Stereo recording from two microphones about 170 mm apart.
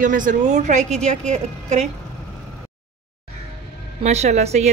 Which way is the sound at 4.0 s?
40° right (ahead or behind).